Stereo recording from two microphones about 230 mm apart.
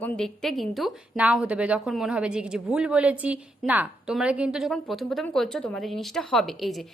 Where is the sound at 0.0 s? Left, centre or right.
Centre.